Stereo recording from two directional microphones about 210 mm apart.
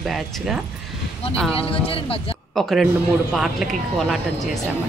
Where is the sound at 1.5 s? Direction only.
25° left (ahead or behind).